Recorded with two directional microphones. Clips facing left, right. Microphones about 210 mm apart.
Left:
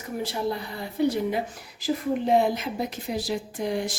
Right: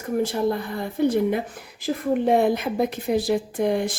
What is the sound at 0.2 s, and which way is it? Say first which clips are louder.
A woman's voice: right 5 dB; 50° right (ahead or behind).